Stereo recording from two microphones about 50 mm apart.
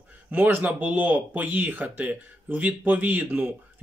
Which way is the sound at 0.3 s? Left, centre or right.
Right.